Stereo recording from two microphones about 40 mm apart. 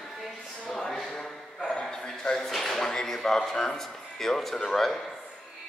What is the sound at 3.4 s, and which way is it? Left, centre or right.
Speech, centre.